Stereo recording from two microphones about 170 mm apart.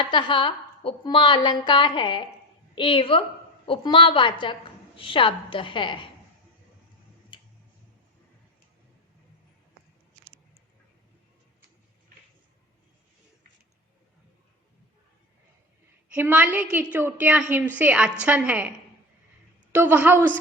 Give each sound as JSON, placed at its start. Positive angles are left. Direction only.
{"t": 0.0, "sound": "a woman's voice", "side_deg": 30}
{"t": 7.3, "sound": "tick-tock", "side_deg": 30}
{"t": 16.1, "sound": "a woman's voice", "side_deg": -10}
{"t": 19.7, "sound": "a woman's voice", "side_deg": -10}